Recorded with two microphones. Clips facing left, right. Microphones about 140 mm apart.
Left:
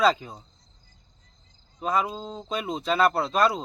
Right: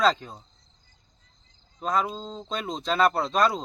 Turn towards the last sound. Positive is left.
turn(degrees=5)  # may be behind; listen again after turning